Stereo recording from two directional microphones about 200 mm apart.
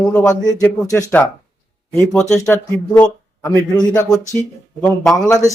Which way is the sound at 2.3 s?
5° left (ahead or behind).